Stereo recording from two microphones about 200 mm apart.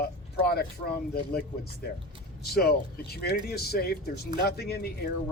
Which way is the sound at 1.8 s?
50° left (ahead or behind).